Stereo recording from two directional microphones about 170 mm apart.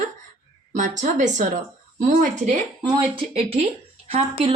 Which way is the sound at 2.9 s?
30° right (ahead or behind).